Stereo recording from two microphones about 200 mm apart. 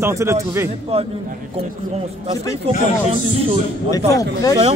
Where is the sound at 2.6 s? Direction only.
30° right (ahead or behind).